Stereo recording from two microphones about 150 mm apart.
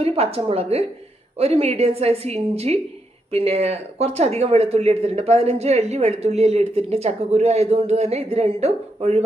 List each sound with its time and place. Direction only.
0.0 s speech: 40° right (ahead or behind)